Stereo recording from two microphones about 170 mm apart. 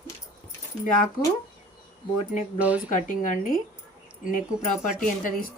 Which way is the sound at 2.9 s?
50° left (ahead or behind).